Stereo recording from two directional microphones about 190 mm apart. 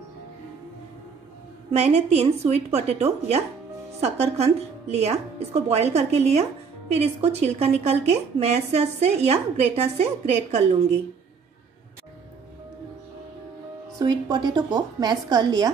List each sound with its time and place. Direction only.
1.7 s a woman's voice: 35° right (ahead or behind)
13.9 s a woman's voice: 20° right (ahead or behind)